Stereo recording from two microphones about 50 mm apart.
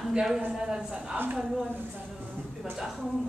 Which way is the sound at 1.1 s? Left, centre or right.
Right.